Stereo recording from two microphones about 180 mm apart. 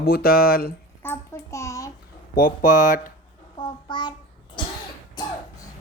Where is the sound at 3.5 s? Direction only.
25° left (ahead or behind).